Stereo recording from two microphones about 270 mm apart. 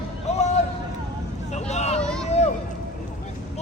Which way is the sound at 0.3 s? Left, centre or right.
Left.